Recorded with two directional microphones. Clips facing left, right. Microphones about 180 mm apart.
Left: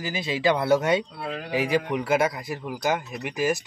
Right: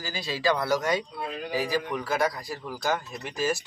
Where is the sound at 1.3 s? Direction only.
65° left (ahead or behind).